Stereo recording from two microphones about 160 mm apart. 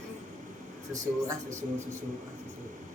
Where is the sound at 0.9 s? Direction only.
20° right (ahead or behind).